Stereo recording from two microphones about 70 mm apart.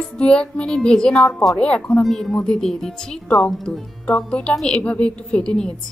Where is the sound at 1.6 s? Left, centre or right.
Centre.